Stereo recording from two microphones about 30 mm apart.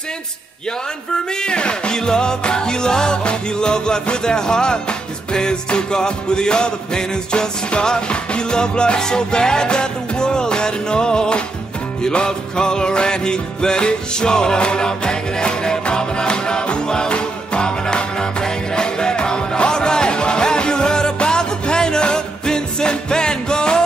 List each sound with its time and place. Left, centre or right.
1.4 s music: left